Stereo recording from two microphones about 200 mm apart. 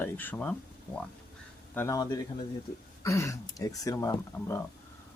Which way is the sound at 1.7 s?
15° left (ahead or behind).